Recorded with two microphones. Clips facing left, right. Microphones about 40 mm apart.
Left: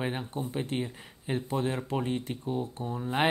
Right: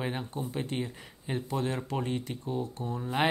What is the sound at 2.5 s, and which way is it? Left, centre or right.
Speech, left.